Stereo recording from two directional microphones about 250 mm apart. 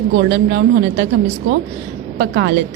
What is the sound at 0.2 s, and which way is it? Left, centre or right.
Speech, right.